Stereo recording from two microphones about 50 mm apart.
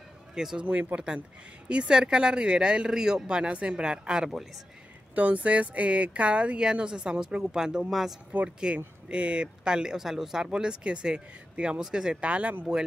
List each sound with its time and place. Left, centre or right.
0.3 s speech: centre
0.7 s speech: right
1.7 s speech: centre
5.1 s speech: right
7.9 s speech: centre
8.7 s speech: right